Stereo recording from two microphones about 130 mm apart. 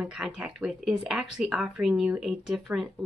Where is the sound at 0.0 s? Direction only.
10° right (ahead or behind).